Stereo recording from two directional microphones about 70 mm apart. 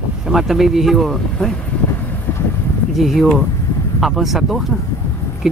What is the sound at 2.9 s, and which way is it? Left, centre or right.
Speech, centre.